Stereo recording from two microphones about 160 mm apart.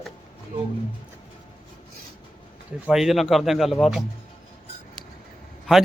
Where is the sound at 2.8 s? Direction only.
Centre (ahead or behind).